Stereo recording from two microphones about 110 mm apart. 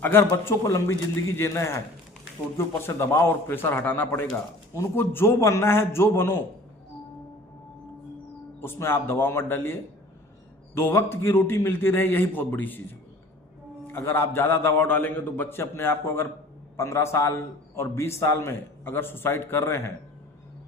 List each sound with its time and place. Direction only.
0.0 s a man's voice: 20° left (ahead or behind)
8.6 s a man's voice: 20° left (ahead or behind)
10.8 s a man's voice: 20° left (ahead or behind)
13.8 s a man's voice: 20° left (ahead or behind)